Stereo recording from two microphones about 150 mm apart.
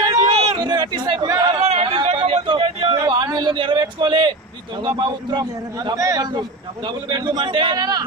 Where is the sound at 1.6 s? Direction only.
40° right (ahead or behind).